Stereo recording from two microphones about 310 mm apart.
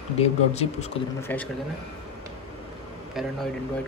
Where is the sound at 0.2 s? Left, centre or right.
Centre.